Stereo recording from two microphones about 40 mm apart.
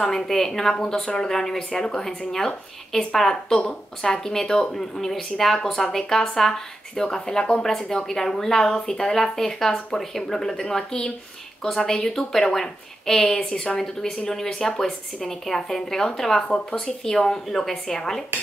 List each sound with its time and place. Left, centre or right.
0.0 s speech: centre
7.6 s a woman's voice: centre